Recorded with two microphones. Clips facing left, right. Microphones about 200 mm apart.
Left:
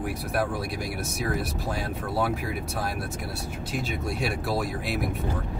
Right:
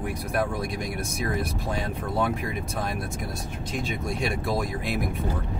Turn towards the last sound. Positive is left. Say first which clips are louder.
# right 1 dB
turn(degrees=5)  # may be behind; listen again after turning